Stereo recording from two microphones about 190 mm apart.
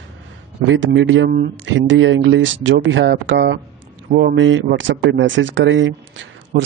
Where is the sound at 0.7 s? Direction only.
85° right.